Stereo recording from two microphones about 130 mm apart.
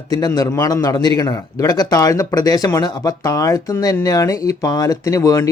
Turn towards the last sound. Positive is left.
turn(degrees=25)  # may be behind; listen again after turning